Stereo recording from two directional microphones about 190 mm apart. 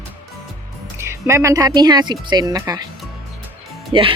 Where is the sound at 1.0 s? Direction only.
15° right (ahead or behind).